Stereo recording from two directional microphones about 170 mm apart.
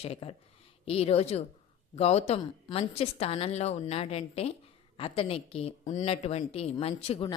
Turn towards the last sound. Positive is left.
turn(degrees=35)  # may be behind; listen again after turning